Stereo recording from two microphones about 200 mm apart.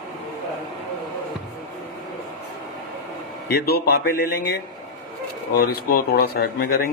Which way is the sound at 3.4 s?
50° left (ahead or behind).